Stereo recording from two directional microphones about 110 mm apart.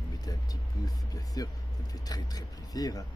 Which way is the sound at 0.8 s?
35° left (ahead or behind).